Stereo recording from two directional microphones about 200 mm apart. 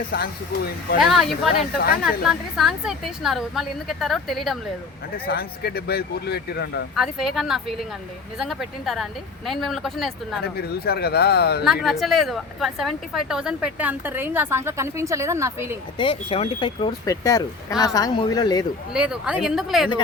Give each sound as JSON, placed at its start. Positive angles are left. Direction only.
{"t": 0.9, "sound": "a woman's voice", "side_deg": 0}
{"t": 5.1, "sound": "speech", "side_deg": 50}
{"t": 6.9, "sound": "a woman's voice", "side_deg": 0}
{"t": 10.4, "sound": "speech", "side_deg": 50}
{"t": 11.6, "sound": "speech", "side_deg": 0}
{"t": 16.0, "sound": "speech", "side_deg": 25}
{"t": 18.9, "sound": "a woman's voice", "side_deg": -5}